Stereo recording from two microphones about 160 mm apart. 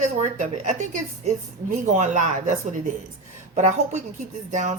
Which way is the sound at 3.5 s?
50° right (ahead or behind).